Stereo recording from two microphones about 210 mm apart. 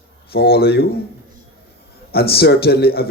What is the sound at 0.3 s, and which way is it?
Speech, 50° left (ahead or behind).